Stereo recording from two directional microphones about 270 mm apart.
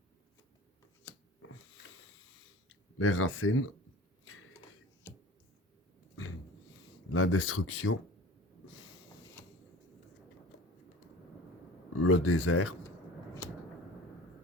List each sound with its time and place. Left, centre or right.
3.0 s speech: left
4.3 s a sound: left
7.1 s speech: left
12.0 s speech: left